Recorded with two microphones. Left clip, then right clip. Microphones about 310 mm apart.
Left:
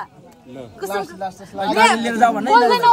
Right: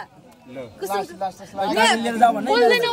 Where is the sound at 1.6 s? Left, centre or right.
Left.